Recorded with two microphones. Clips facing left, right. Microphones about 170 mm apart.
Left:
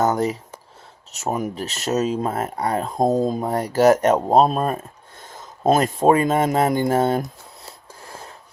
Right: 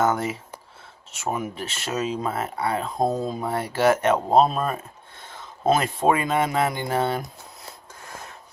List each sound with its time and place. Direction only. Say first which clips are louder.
0.0 s speech: left 3 dB; 40° left (ahead or behind)